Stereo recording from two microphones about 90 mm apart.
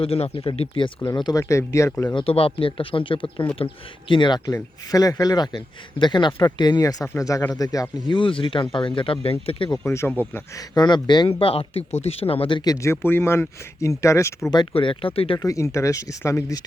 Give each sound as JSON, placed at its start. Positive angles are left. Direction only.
{"t": 0.0, "sound": "speech", "side_deg": 90}
{"t": 1.1, "sound": "speech", "side_deg": 50}
{"t": 2.1, "sound": "speech", "side_deg": 90}
{"t": 4.4, "sound": "a man's voice", "side_deg": 40}
{"t": 7.2, "sound": "speech", "side_deg": 35}
{"t": 8.1, "sound": "speech", "side_deg": 70}
{"t": 9.7, "sound": "speech", "side_deg": 30}
{"t": 10.8, "sound": "speech", "side_deg": 55}
{"t": 11.3, "sound": "speech", "side_deg": 90}
{"t": 12.6, "sound": "speech", "side_deg": 35}
{"t": 14.5, "sound": "speech", "side_deg": 70}
{"t": 15.4, "sound": "speech", "side_deg": 35}